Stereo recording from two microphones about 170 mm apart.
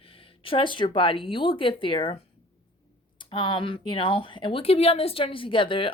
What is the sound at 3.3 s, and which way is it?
Speech, 30° left (ahead or behind).